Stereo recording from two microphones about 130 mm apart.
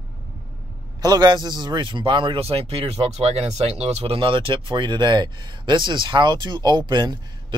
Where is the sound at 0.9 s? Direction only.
30° right (ahead or behind).